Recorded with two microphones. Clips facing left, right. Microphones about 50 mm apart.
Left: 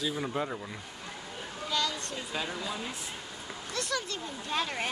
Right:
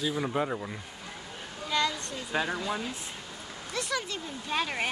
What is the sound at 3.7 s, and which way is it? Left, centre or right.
Speech, centre.